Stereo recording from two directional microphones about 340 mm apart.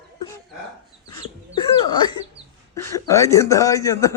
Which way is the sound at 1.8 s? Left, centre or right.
Centre.